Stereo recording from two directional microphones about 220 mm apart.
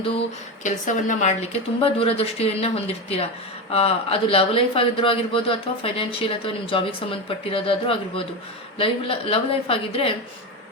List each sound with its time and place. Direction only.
0.6 s speech: 35° left (ahead or behind)